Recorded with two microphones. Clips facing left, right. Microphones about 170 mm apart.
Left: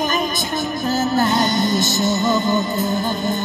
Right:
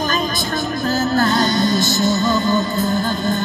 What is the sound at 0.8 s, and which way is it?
Music, 20° left (ahead or behind).